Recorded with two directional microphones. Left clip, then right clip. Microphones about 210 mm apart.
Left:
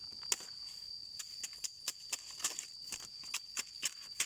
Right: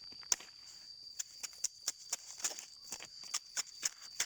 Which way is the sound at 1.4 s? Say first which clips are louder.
Right 1 dB; 5° left (ahead or behind).